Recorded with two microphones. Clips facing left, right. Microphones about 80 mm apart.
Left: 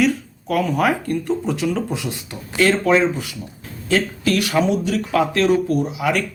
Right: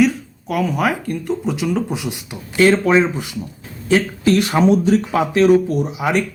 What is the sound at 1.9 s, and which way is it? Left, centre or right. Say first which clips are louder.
A man's voice: right 1 dB; centre.